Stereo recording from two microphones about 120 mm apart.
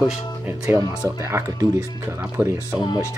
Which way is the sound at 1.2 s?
25° right (ahead or behind).